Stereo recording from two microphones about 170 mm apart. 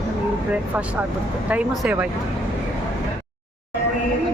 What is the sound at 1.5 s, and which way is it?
Speech, 5° right (ahead or behind).